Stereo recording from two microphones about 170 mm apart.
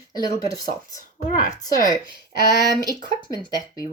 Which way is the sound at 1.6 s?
20° left (ahead or behind).